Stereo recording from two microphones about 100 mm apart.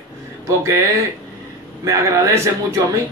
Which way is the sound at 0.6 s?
30° right (ahead or behind).